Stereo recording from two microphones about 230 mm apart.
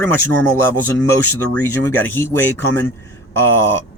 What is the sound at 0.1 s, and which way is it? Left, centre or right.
Speech, centre.